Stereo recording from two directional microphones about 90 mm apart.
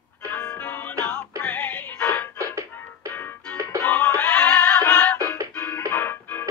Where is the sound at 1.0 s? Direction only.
10° left (ahead or behind).